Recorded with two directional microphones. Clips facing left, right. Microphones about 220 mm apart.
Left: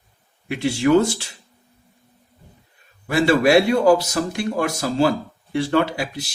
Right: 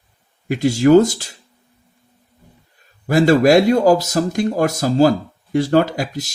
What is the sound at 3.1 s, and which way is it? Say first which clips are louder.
Speech: right 4 dB; 40° right (ahead or behind).